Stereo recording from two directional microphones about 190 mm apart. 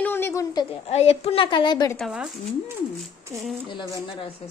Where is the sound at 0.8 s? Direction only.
30° left (ahead or behind).